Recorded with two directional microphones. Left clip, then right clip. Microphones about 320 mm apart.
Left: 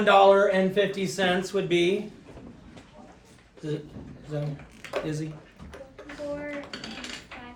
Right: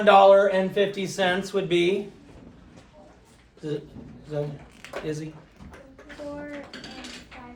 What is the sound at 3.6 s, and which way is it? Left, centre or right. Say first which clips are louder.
Speech: right 2 dB; centre.